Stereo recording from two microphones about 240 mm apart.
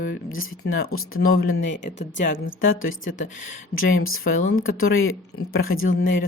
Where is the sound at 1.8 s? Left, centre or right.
Left.